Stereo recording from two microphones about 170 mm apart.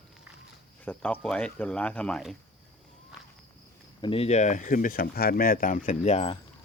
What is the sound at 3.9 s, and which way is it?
Speech, 30° left (ahead or behind).